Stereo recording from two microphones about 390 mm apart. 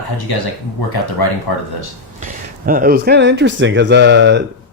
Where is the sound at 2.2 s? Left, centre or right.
Right.